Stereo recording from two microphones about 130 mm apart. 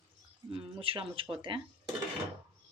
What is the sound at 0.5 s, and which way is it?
Speech, 45° right (ahead or behind).